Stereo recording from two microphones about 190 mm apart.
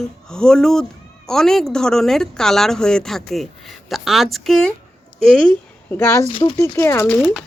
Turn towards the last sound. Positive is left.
turn(degrees=0)  # may be behind; listen again after turning